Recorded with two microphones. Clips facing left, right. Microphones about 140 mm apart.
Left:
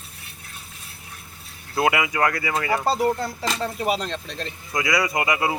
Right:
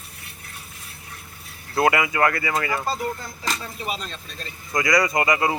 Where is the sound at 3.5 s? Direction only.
65° left (ahead or behind).